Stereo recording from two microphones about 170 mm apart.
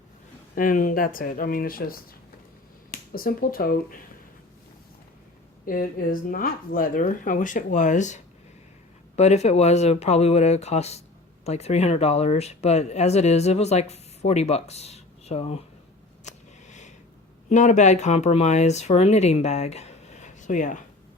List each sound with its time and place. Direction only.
0.5 s speech: 55° left (ahead or behind)
3.1 s speech: 60° left (ahead or behind)
5.6 s speech: 55° left (ahead or behind); by 15.6 s 40° left (ahead or behind)
16.2 s a sound: 45° left (ahead or behind)
17.5 s speech: 45° left (ahead or behind)